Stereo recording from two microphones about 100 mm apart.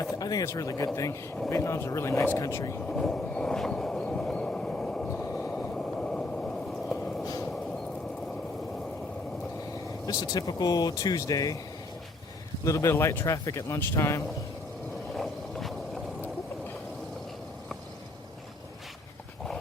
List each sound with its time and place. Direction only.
0.0 s speech: 40° left (ahead or behind)
2.8 s vehicle: 5° left (ahead or behind)
5.1 s vehicle: 20° left (ahead or behind)
5.6 s vehicle: 10° left (ahead or behind)
10.1 s speech: 40° left (ahead or behind)
12.6 s speech: 30° left (ahead or behind)
15.1 s vehicle: centre (ahead or behind)